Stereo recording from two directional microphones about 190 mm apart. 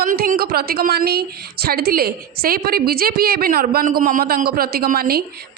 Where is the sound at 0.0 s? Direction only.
45° right (ahead or behind).